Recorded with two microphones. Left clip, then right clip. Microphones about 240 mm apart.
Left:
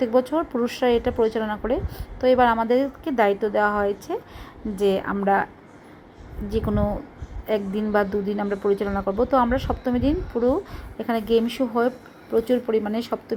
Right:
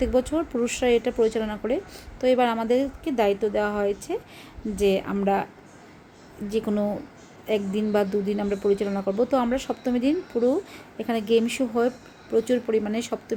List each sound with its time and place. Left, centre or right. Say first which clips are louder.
0.0 s a woman's voice: left 3 dB; centre
6.5 s speech: left 1 dB; centre